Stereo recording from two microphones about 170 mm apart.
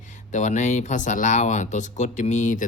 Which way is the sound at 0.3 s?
45° left (ahead or behind).